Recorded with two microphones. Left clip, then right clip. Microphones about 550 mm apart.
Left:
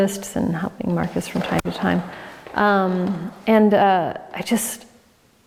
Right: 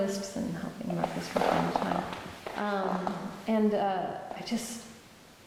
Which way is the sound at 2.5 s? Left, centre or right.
Left.